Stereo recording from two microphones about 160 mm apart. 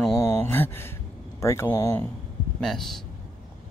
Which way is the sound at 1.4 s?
15° left (ahead or behind).